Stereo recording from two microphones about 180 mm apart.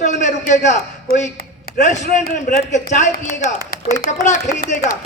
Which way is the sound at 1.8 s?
40° left (ahead or behind).